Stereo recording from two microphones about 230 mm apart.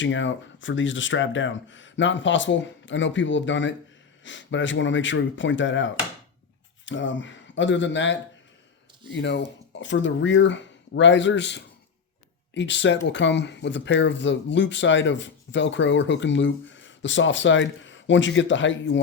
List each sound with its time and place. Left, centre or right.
0.0 s speech: left